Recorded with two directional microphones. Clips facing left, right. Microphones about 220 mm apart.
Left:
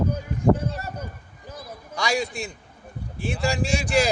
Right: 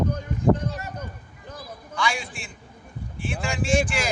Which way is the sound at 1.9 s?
40° left (ahead or behind).